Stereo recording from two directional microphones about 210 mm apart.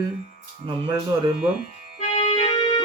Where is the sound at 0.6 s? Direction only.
25° right (ahead or behind).